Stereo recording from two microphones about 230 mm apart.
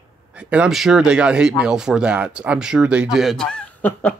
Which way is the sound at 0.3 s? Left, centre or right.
Centre.